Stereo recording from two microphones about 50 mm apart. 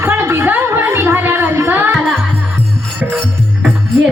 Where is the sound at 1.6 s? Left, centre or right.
Right.